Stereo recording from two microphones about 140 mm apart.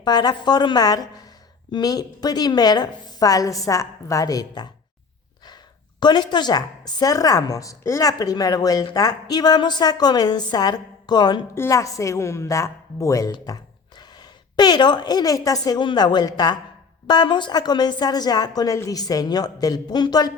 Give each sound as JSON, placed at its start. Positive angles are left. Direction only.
{"t": 0.0, "sound": "a woman's voice", "side_deg": 30}
{"t": 6.0, "sound": "a woman's voice", "side_deg": 30}
{"t": 11.5, "sound": "a woman's voice", "side_deg": 20}